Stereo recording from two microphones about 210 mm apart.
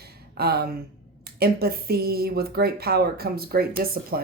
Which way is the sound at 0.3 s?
50° right (ahead or behind).